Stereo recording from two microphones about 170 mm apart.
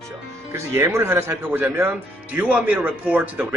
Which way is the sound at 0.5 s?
15° right (ahead or behind).